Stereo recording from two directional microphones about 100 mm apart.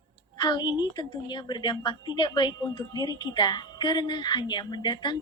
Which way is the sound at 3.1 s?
50° left (ahead or behind).